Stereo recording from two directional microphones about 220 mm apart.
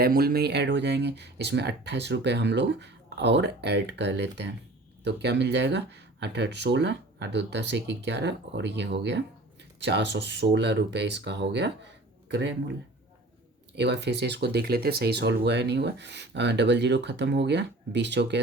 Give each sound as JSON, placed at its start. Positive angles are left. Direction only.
{"t": 0.0, "sound": "speech", "side_deg": -45}
{"t": 13.7, "sound": "speech", "side_deg": -50}